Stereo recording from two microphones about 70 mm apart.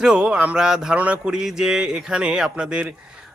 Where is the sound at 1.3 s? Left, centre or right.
Centre.